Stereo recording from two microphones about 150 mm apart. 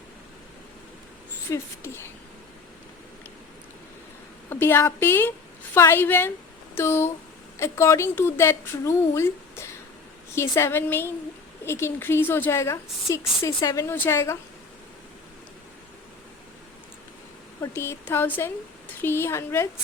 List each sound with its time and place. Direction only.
1.5 s a woman's voice: 20° left (ahead or behind)
4.4 s a woman's voice: 15° left (ahead or behind)
17.6 s a woman's voice: 20° left (ahead or behind)